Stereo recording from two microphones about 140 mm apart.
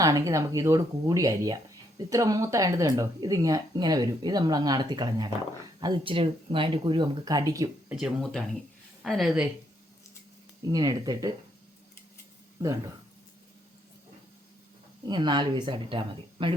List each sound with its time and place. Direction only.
0.0 s speech: 25° right (ahead or behind)
7.9 s speech: centre (ahead or behind)
10.7 s speech: 25° right (ahead or behind)
15.0 s speech: 30° right (ahead or behind)